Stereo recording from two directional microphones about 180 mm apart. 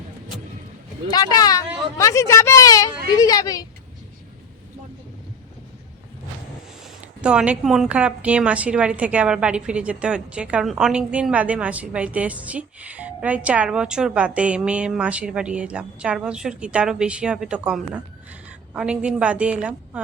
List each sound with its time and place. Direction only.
1.0 s speech: 20° left (ahead or behind)
7.2 s a woman's voice: 5° right (ahead or behind)